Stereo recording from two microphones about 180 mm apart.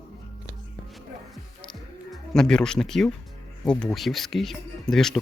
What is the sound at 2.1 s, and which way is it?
Speech, 5° left (ahead or behind).